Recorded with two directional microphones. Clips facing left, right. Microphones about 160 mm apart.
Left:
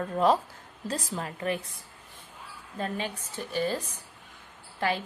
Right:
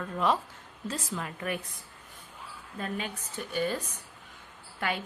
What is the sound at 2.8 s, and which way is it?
Speech, 35° left (ahead or behind).